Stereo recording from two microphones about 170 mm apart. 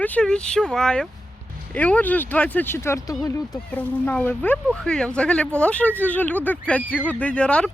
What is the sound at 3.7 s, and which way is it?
Speech, 10° left (ahead or behind).